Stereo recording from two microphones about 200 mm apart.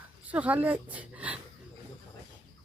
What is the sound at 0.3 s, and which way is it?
Speech, 5° right (ahead or behind).